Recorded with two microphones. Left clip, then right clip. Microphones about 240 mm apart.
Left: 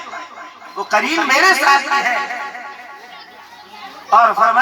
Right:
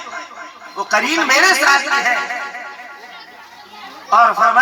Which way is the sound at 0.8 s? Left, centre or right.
Right.